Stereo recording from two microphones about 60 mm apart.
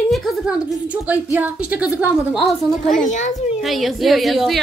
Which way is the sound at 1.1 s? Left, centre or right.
Right.